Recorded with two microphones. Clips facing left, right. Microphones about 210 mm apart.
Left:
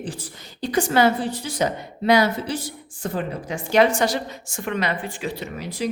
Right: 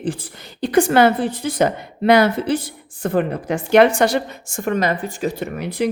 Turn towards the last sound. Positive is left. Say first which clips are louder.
# right 6 dB
turn(degrees=-60)  # may be behind; listen again after turning